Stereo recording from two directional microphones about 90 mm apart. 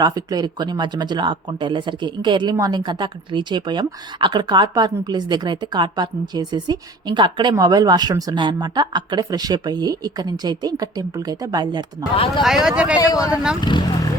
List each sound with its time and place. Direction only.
0.0 s speech: 45° right (ahead or behind)
7.5 s speech: 45° right (ahead or behind)
12.4 s speech: 5° right (ahead or behind)
13.0 s speech: 40° left (ahead or behind)
13.3 s speech: 10° right (ahead or behind)
13.6 s speech: 60° left (ahead or behind)